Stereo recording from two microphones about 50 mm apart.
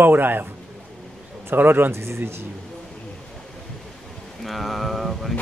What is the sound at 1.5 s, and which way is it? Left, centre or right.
Speech, right.